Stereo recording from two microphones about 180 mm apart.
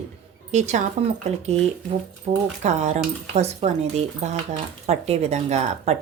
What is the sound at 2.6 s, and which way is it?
A woman's voice, 40° right (ahead or behind).